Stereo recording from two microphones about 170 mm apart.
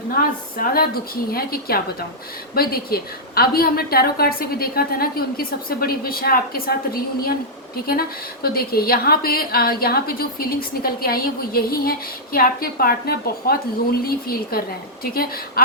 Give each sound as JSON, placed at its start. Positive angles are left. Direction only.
{"t": 0.1, "sound": "a woman's voice", "side_deg": 60}